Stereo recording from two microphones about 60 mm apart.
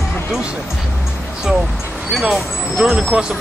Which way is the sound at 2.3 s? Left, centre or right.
Centre.